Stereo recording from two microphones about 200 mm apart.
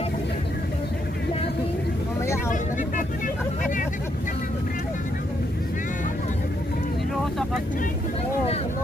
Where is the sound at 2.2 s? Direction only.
15° left (ahead or behind).